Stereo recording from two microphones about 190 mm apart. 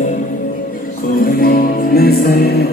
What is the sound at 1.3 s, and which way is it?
Music, 50° left (ahead or behind).